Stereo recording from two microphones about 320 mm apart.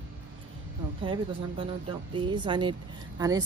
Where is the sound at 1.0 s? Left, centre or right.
Centre.